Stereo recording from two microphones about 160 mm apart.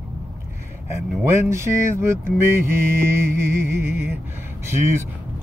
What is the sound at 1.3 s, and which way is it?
Mantra, 15° right (ahead or behind).